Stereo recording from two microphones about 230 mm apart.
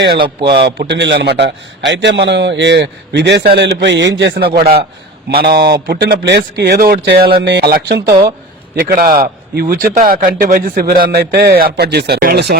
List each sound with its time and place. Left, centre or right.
0.6 s a man's voice: right